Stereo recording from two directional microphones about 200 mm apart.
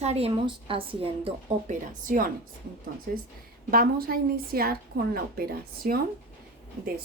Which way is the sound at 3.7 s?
45° right (ahead or behind).